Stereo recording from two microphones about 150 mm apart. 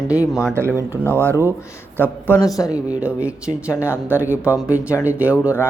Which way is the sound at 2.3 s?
25° left (ahead or behind).